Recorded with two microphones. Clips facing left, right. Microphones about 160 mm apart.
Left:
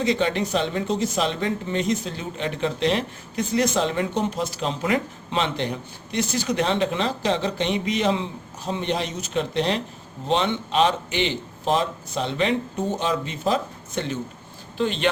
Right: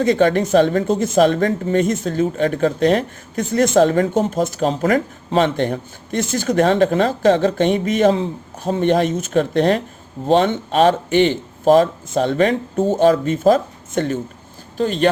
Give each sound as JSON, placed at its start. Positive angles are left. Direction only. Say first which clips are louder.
{"t": 0.0, "sound": "speech", "louder": "right 7 dB", "side_deg": -50}